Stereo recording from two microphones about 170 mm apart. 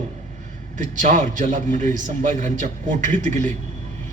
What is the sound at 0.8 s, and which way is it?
A man's voice, 50° right (ahead or behind).